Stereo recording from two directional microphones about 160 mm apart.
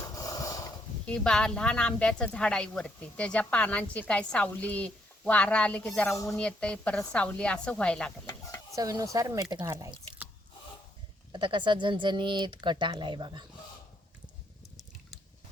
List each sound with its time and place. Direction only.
0.0 s a sound: 20° left (ahead or behind)
1.0 s speech: 5° left (ahead or behind)
8.7 s speech: 20° right (ahead or behind)
11.3 s speech: 30° right (ahead or behind)